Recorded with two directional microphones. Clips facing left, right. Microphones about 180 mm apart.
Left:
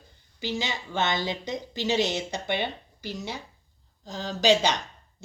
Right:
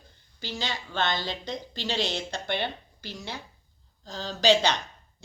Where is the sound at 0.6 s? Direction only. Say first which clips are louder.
Right 1 dB; 20° left (ahead or behind).